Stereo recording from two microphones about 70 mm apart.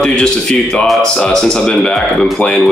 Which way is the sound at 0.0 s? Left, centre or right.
Centre.